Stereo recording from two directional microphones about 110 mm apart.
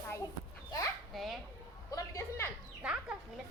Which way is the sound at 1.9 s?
25° left (ahead or behind).